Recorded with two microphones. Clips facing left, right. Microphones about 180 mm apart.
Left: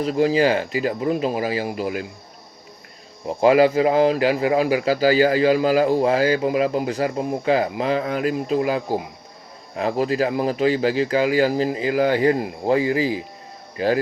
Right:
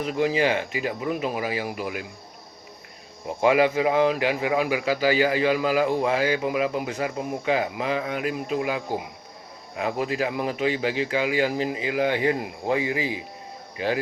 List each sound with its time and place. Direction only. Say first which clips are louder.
0.0 s a man's voice: left 5 dB; 35° left (ahead or behind)
3.4 s a man's voice: left 5 dB; 35° left (ahead or behind)